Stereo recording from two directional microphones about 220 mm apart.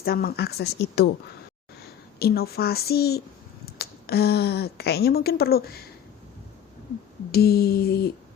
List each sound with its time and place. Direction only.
0.0 s a child's voice: 45° left (ahead or behind)
2.1 s a child's voice: 45° left (ahead or behind)
7.3 s a child's voice: 45° left (ahead or behind)